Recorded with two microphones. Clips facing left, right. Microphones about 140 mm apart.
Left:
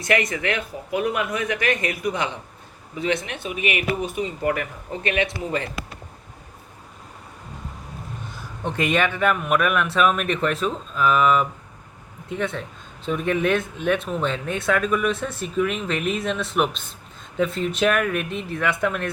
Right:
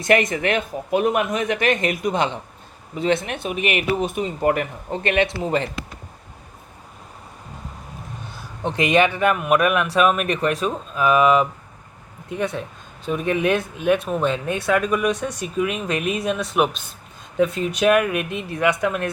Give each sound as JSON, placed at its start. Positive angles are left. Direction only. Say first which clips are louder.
{"t": 0.0, "sound": "speech", "louder": "right 4 dB", "side_deg": -25}
{"t": 3.4, "sound": "speech", "louder": "right 2 dB", "side_deg": -65}
{"t": 4.2, "sound": "speech", "louder": "right 3 dB", "side_deg": -35}
{"t": 8.6, "sound": "speech", "louder": "right 4 dB", "side_deg": -15}
{"t": 13.1, "sound": "speech", "louder": "right 1 dB", "side_deg": -15}